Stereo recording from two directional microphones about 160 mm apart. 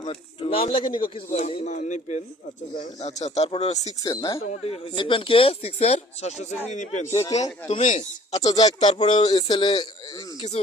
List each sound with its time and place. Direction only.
0.0 s speech: 35° left (ahead or behind)
1.3 s speech: 45° left (ahead or behind)
4.0 s speech: 25° left (ahead or behind)
4.4 s speech: 40° left (ahead or behind)
7.1 s speech: 20° left (ahead or behind)
7.7 s speech: 45° left (ahead or behind)
8.4 s speech: 25° left (ahead or behind)
9.0 s speech: 50° left (ahead or behind)
9.2 s speech: 30° left (ahead or behind)